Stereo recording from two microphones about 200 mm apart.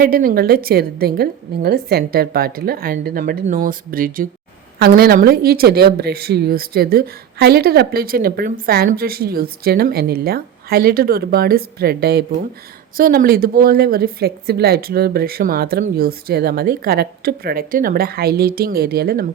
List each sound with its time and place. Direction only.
0.0 s speech: 45° right (ahead or behind)